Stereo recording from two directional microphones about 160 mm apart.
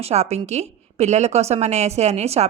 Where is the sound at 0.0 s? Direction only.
40° right (ahead or behind).